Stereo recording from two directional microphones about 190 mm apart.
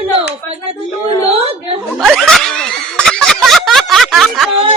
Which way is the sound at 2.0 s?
Centre (ahead or behind).